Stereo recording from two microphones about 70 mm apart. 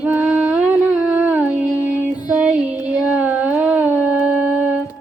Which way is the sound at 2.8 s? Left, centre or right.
Centre.